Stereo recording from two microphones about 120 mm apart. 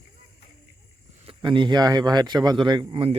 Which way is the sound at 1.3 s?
40° right (ahead or behind).